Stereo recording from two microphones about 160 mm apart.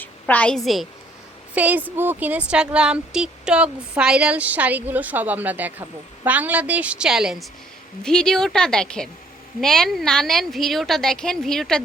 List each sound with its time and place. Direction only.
0.0 s a woman's voice: 10° left (ahead or behind)
1.5 s a woman's voice: 10° right (ahead or behind)